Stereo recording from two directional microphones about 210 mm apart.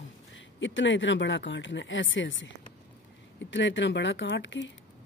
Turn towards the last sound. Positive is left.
turn(degrees=60)  # may be behind; listen again after turning